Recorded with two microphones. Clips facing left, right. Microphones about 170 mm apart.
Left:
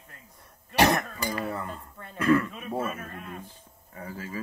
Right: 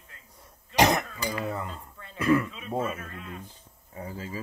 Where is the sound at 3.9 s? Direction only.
20° right (ahead or behind).